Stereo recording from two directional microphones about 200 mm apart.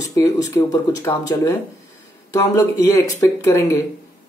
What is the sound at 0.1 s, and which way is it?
Speech, 15° left (ahead or behind).